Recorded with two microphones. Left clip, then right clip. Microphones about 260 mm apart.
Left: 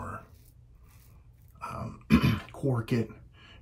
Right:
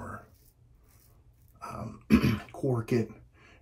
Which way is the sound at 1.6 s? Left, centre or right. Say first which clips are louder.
Left 2 dB; left.